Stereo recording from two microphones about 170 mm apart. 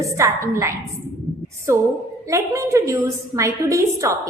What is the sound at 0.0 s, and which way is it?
A woman's voice, 20° right (ahead or behind).